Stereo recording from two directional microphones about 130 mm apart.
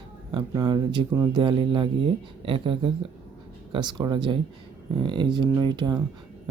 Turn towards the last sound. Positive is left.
turn(degrees=-35)  # may be behind; listen again after turning